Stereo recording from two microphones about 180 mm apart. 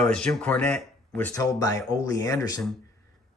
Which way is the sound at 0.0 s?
5° left (ahead or behind).